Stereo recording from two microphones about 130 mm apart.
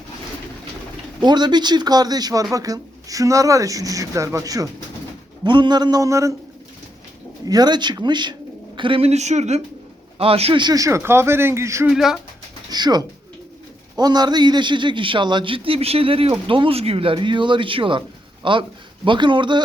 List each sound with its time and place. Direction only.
1.2 s a man's voice: 35° right (ahead or behind)
7.4 s speech: 30° right (ahead or behind); by 9.6 s 60° right (ahead or behind)
10.2 s a man's voice: 50° right (ahead or behind)
10.6 s speech: 30° right (ahead or behind)
11.9 s speech: 5° right (ahead or behind)
12.7 s a man's voice: 30° right (ahead or behind)